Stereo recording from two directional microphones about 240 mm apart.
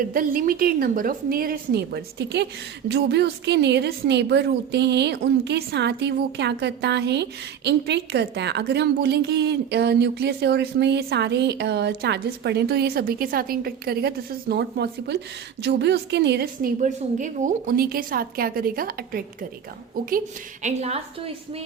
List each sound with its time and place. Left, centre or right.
0.1 s a woman's voice: right